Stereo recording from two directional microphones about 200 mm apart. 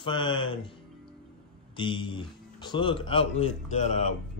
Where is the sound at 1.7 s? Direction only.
25° left (ahead or behind).